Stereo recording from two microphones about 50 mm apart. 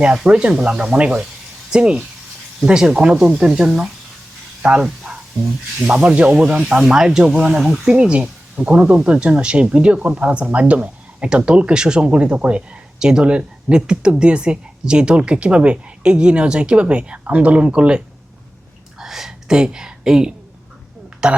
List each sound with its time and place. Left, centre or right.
0.3 s speech: centre
4.6 s speech: right
5.9 s speech: right
18.9 s a sound: centre
21.2 s speech: centre